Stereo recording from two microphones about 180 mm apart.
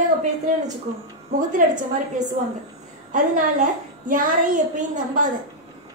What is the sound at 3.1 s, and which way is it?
Speech, 45° right (ahead or behind).